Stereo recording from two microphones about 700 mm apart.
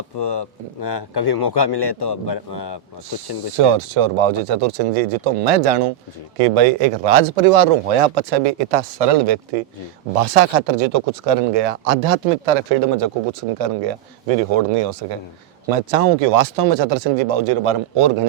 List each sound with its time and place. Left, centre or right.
0.2 s a man's voice: left
3.5 s speech: right